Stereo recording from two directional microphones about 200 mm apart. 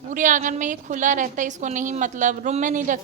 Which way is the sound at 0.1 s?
40° right (ahead or behind).